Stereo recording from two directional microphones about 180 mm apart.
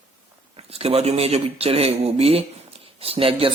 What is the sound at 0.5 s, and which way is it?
Speech, 35° right (ahead or behind).